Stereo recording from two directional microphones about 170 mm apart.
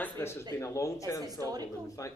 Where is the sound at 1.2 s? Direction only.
20° right (ahead or behind).